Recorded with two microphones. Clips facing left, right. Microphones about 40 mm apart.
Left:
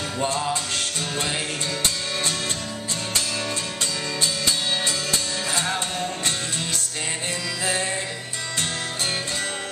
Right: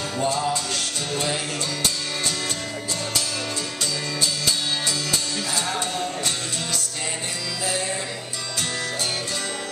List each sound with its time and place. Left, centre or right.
0.2 s music: left
4.2 s music: left